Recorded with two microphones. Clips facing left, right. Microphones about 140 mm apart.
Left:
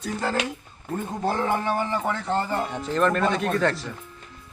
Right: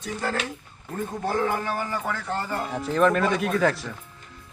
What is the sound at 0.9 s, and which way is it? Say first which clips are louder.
A man's voice: left 1 dB; 25° left (ahead or behind).